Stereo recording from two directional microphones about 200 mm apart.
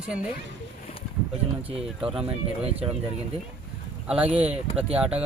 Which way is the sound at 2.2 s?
30° right (ahead or behind).